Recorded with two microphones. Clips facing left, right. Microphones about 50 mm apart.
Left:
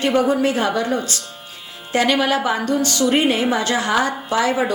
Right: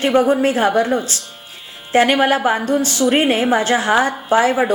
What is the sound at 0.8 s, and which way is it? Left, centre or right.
Speech, centre.